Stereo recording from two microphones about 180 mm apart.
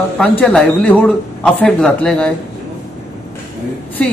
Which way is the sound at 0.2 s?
5° left (ahead or behind).